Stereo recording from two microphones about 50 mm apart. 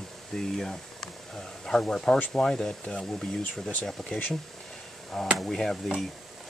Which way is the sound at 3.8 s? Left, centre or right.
Centre.